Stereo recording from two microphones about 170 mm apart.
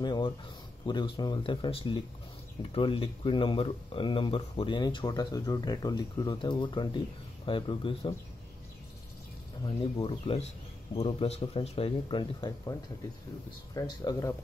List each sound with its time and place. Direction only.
0.0 s speech: 25° left (ahead or behind)
10.0 s speech: 35° left (ahead or behind)
13.7 s speech: 20° left (ahead or behind)